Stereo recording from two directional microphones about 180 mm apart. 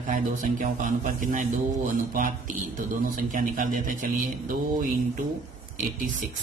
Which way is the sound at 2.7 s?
50° right (ahead or behind).